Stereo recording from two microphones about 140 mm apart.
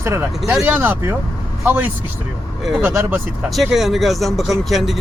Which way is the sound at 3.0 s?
15° right (ahead or behind).